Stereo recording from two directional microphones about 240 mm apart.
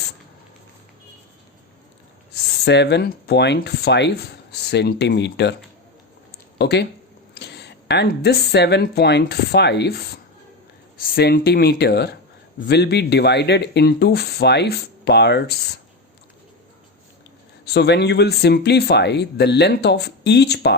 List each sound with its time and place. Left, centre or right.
2.3 s speech: left
6.6 s speech: left
17.7 s speech: left